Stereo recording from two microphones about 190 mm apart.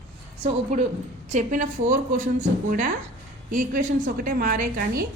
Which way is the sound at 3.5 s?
45° right (ahead or behind).